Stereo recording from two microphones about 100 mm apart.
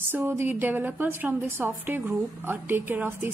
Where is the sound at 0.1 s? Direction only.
20° right (ahead or behind).